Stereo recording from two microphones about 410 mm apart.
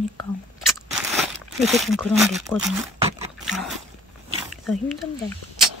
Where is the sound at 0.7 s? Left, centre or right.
Centre.